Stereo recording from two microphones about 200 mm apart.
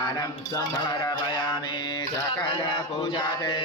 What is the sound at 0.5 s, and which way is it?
Mantra, 20° left (ahead or behind).